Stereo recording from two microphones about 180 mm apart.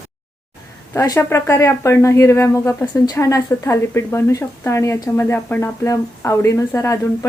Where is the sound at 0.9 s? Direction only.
15° left (ahead or behind).